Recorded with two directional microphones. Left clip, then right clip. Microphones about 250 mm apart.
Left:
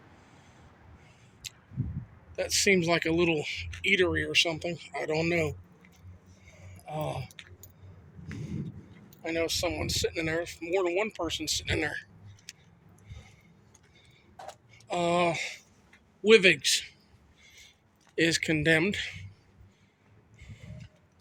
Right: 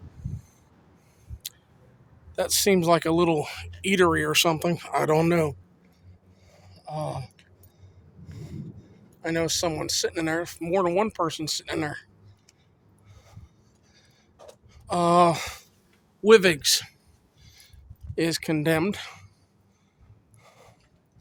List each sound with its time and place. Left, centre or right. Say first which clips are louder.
2.3 s speech: right 3 dB; right
6.5 s a sound: right 3 dB; centre
8.4 s a sound: left 2 dB; right
9.3 s speech: right 4 dB; right
14.8 s speech: right 7 dB; right
18.1 s speech: even; centre